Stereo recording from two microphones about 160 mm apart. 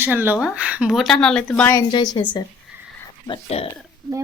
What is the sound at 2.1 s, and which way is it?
Speech, 30° left (ahead or behind).